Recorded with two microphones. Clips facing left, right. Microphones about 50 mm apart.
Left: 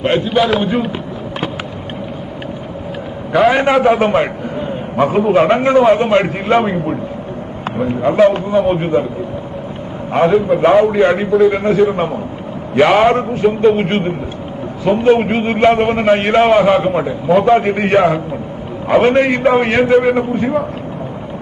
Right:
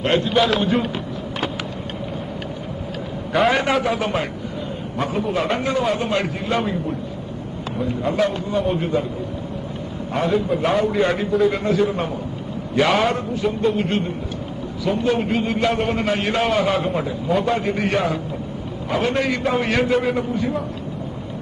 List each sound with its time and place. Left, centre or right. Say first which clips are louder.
0.0 s a man's voice: left 4 dB; centre
3.6 s a man's voice: left 7 dB; left
3.8 s a man's voice: left 10 dB; left
8.1 s a man's voice: left 11 dB; left
10.1 s a man's voice: left 8 dB; left
11.3 s a man's voice: left 7 dB; centre
11.5 s a man's voice: left 7 dB; left
17.5 s a man's voice: left 9 dB; left
19.9 s a man's voice: left 8 dB; centre
20.1 s a man's voice: left 6 dB; left